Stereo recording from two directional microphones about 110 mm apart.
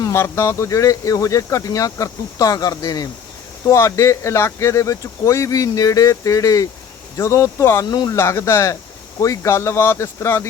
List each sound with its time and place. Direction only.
0.0 s speech: 25° left (ahead or behind)
7.9 s speech: 35° left (ahead or behind)